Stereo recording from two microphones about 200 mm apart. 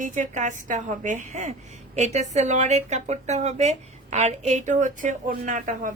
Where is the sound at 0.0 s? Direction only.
40° right (ahead or behind).